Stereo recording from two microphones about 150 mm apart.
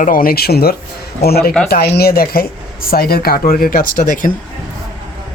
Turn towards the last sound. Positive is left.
turn(degrees=60)  # may be behind; listen again after turning